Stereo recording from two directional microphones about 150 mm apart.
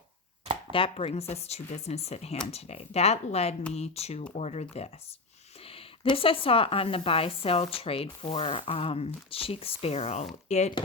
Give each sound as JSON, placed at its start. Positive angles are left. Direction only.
{"t": 0.7, "sound": "speech", "side_deg": 40}